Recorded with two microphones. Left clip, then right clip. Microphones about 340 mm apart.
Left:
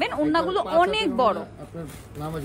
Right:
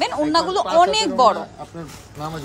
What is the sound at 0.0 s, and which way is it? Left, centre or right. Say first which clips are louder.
A woman's voice: right 4 dB; centre.